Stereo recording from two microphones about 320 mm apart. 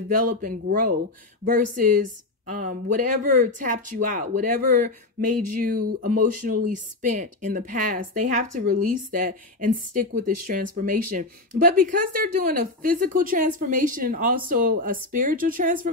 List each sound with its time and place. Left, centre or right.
0.1 s a woman's voice: right